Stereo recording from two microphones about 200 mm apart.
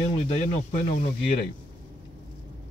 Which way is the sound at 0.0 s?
35° left (ahead or behind).